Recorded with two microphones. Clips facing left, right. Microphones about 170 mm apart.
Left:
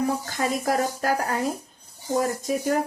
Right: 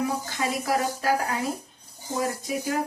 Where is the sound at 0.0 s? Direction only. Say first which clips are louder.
Left 2 dB; 45° left (ahead or behind).